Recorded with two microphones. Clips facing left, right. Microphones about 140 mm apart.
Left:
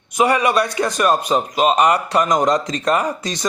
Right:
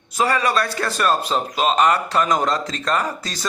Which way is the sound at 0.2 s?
20° left (ahead or behind).